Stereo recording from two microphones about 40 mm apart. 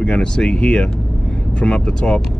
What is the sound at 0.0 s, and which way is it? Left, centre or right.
Speech, left.